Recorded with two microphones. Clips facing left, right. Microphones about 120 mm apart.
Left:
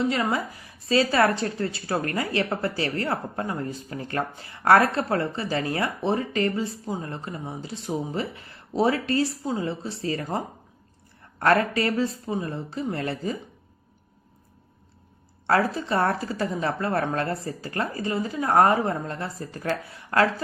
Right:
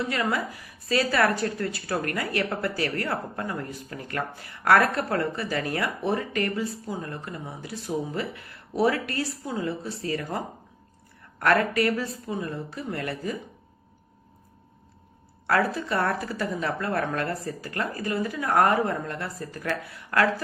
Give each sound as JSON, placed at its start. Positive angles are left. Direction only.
{"t": 0.1, "sound": "a woman's voice", "side_deg": 25}
{"t": 15.4, "sound": "a woman's voice", "side_deg": 25}